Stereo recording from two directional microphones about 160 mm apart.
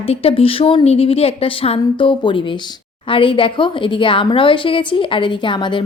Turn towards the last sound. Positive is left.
turn(degrees=30)  # may be behind; listen again after turning